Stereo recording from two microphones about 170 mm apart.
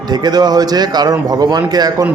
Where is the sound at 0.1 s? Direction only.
25° right (ahead or behind).